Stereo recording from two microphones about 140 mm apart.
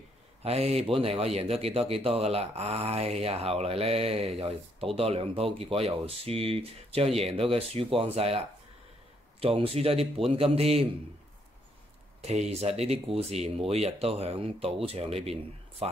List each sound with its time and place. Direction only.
0.4 s speech: 45° right (ahead or behind)
9.4 s speech: 45° right (ahead or behind)
12.2 s speech: 50° right (ahead or behind)